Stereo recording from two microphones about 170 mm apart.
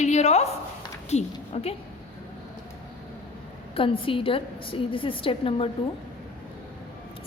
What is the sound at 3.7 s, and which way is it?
A woman's voice, 30° left (ahead or behind).